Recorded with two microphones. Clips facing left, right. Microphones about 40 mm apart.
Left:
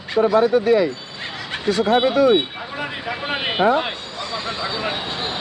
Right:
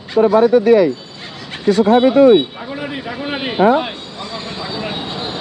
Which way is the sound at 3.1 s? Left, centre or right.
Centre.